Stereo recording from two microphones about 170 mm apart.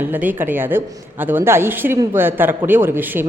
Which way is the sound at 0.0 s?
10° right (ahead or behind).